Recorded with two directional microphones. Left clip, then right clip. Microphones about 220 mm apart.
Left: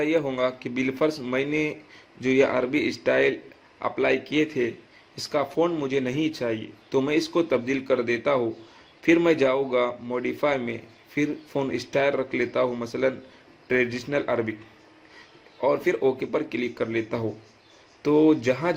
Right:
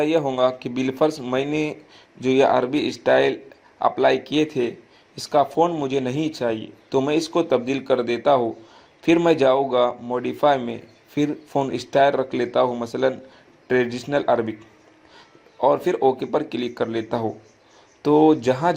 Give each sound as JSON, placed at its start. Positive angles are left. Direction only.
{"t": 0.0, "sound": "speech", "side_deg": -20}
{"t": 15.6, "sound": "speech", "side_deg": -20}